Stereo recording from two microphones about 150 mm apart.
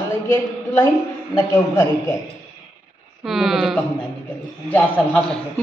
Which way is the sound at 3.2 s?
Centre (ahead or behind).